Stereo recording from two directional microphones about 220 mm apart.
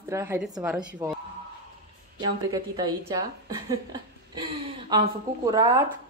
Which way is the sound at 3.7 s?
20° right (ahead or behind).